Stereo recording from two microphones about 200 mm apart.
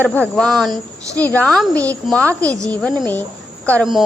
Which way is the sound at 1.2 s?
10° left (ahead or behind).